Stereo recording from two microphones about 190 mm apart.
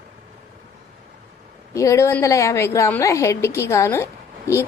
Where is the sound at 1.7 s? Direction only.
15° left (ahead or behind).